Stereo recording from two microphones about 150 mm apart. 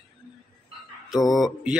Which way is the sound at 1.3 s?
Centre (ahead or behind).